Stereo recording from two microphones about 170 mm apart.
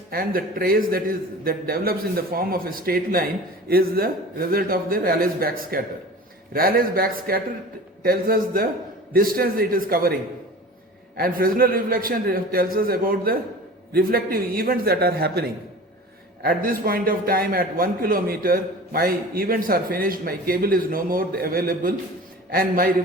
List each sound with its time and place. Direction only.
0.1 s a man's voice: 60° right (ahead or behind)
11.2 s a man's voice: 60° right (ahead or behind)